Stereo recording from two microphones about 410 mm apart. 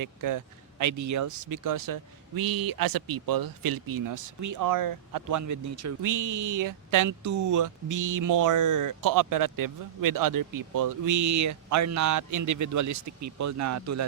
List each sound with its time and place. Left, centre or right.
0.0 s speech: right